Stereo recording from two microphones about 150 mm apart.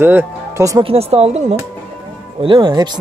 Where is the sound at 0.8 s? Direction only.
40° right (ahead or behind).